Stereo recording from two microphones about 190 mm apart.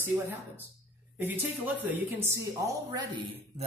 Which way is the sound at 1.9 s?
10° right (ahead or behind).